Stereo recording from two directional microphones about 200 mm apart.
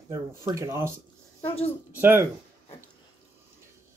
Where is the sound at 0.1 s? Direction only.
15° right (ahead or behind).